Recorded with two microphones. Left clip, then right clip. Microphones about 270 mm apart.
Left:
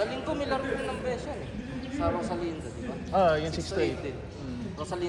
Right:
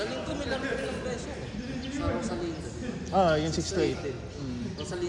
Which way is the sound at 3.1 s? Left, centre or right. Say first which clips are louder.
Even; right.